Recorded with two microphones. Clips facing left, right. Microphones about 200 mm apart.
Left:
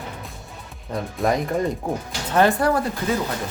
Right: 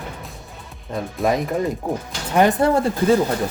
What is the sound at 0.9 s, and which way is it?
Speech, centre (ahead or behind).